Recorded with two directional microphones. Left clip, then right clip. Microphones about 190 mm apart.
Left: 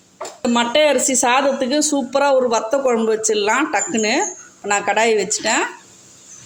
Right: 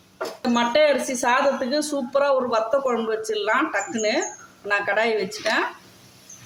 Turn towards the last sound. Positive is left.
turn(degrees=35)  # may be behind; listen again after turning